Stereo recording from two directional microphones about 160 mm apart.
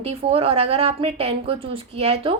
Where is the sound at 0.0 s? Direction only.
40° right (ahead or behind).